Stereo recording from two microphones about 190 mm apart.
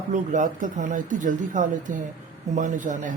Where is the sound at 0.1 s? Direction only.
40° right (ahead or behind).